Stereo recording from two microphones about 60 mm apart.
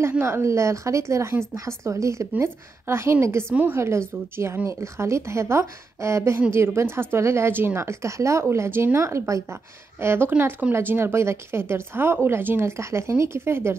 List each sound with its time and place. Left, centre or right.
0.2 s a woman's voice: right
9.9 s speech: right